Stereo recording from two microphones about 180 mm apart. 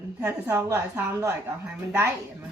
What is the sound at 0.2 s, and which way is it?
A woman's voice, 10° right (ahead or behind).